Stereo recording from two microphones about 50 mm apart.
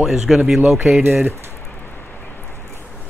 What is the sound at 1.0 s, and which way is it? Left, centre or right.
Speech, right.